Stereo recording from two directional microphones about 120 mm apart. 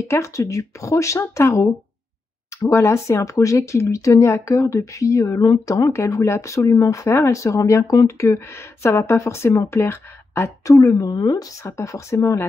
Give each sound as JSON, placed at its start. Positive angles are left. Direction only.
{"t": 0.1, "sound": "speech", "side_deg": 25}
{"t": 2.7, "sound": "speech", "side_deg": 25}
{"t": 11.6, "sound": "speech", "side_deg": 25}